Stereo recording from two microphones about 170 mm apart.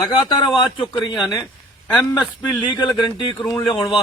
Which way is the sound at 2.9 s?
30° left (ahead or behind).